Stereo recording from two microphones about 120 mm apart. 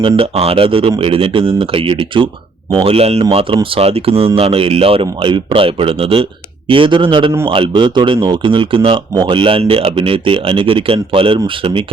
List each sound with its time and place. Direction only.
0.2 s speech: 55° right (ahead or behind)